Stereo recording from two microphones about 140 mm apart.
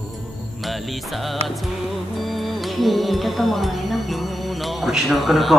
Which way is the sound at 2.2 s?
Centre (ahead or behind).